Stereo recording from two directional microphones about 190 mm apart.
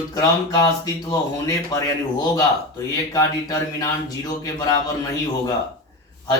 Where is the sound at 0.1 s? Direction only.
20° left (ahead or behind).